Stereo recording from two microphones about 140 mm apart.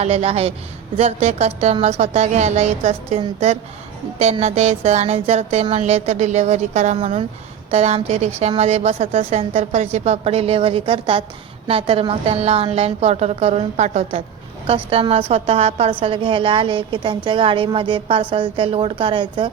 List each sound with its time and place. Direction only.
0.0 s a woman's voice: 45° right (ahead or behind)
6.9 s a woman's voice: 40° right (ahead or behind)